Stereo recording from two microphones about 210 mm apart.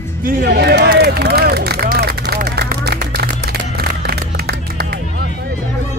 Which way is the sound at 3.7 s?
50° right (ahead or behind).